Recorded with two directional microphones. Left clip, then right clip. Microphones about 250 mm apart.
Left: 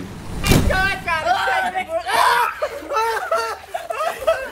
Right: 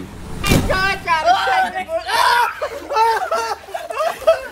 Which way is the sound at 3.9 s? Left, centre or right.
Centre.